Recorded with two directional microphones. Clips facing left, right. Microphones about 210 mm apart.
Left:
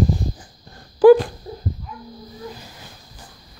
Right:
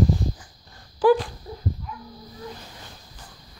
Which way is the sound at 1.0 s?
50° left (ahead or behind).